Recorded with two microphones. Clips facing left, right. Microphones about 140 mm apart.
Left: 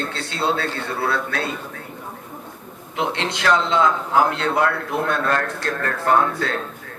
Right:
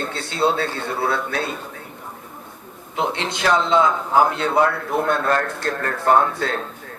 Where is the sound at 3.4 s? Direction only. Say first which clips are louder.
Right 1 dB; 25° right (ahead or behind).